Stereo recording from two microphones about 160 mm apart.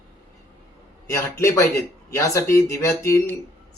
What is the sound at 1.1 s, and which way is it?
Speech, 20° left (ahead or behind).